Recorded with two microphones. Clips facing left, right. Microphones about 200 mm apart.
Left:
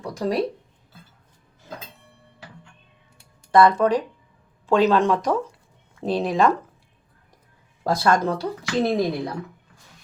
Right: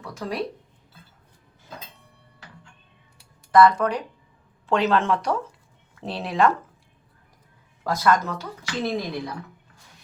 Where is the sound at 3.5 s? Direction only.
25° left (ahead or behind).